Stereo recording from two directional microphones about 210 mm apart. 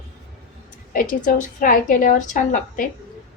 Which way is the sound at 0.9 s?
40° left (ahead or behind).